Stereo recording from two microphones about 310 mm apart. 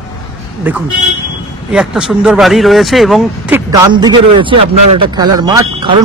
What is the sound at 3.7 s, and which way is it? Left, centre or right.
A man's voice, centre.